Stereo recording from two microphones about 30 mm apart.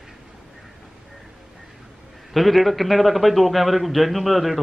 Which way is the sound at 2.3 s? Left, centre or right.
Centre.